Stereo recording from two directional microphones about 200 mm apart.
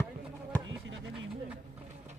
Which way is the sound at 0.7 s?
70° right (ahead or behind).